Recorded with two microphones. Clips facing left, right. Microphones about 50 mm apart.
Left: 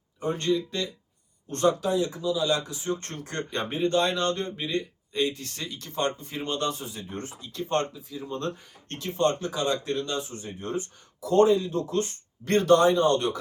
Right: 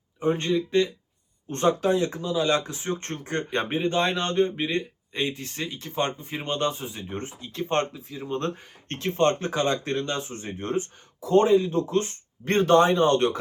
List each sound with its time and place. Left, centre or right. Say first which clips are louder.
0.2 s speech: right 2 dB; right
1.9 s speech: right 2 dB; right